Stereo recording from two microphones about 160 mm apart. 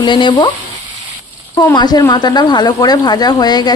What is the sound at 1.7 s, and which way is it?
Speech, 25° left (ahead or behind).